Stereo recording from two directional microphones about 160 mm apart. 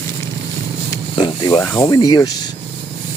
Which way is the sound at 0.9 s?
25° left (ahead or behind).